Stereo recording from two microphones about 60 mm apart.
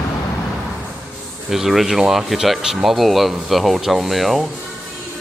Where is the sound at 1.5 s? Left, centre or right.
Centre.